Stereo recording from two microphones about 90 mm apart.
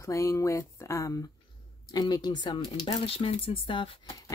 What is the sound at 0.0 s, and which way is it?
Speech, 35° left (ahead or behind).